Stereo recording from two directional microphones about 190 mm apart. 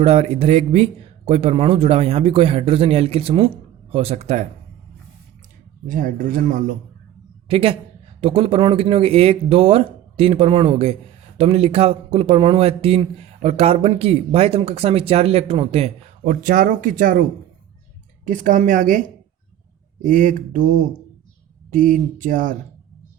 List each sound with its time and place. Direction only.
0.0 s a man's voice: 30° right (ahead or behind)
5.9 s speech: 45° right (ahead or behind)
7.4 s a woman's voice: 30° right (ahead or behind); by 17.2 s 45° right (ahead or behind)
18.3 s a man's voice: 45° right (ahead or behind)